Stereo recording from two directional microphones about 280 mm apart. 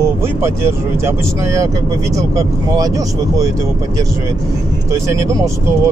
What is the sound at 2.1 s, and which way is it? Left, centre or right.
Speech, centre.